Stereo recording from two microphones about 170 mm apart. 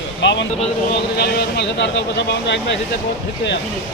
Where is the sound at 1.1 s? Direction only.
70° left (ahead or behind); by 2.8 s 90° left.